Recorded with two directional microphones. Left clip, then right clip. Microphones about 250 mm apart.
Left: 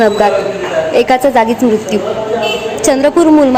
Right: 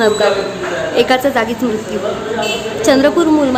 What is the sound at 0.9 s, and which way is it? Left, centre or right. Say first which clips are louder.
Speech: left 3 dB; centre.